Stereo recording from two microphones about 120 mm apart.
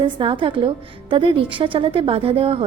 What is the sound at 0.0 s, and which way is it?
A woman's voice, 45° right (ahead or behind).